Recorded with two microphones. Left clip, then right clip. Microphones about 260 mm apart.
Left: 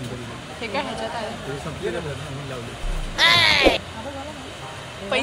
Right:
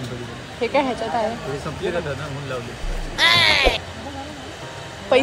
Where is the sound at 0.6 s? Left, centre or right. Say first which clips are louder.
Right 7 dB; right.